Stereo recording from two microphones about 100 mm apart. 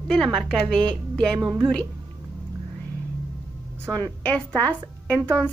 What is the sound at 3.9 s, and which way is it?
Speech, 15° left (ahead or behind).